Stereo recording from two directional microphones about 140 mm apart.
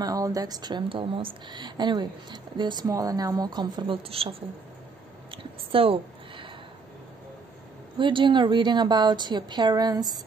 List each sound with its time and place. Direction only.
0.0 s speech: 25° right (ahead or behind); by 4.4 s 40° right (ahead or behind)
5.3 s a sound: 40° right (ahead or behind)
8.0 s speech: 35° right (ahead or behind)